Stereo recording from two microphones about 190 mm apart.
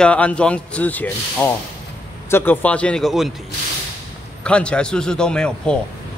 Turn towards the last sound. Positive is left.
turn(degrees=5)  # may be behind; listen again after turning